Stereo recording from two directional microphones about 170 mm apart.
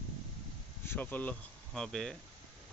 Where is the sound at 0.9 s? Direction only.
10° left (ahead or behind).